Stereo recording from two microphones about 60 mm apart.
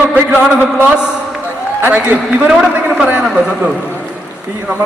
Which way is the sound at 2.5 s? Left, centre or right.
Centre.